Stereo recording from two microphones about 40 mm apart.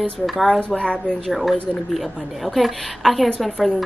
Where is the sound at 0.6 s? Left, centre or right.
Left.